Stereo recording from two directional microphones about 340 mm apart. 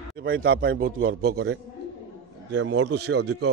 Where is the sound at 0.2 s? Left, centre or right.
Right.